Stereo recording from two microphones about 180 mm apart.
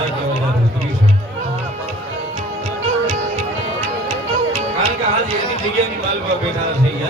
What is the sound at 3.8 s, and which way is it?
Music, 35° right (ahead or behind).